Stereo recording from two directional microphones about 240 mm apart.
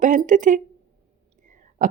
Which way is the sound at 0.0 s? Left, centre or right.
Right.